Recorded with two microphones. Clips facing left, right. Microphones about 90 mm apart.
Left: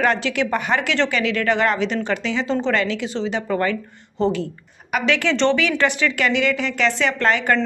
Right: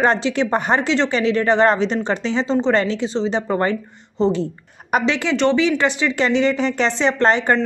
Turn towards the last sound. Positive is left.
turn(degrees=-30)  # may be behind; listen again after turning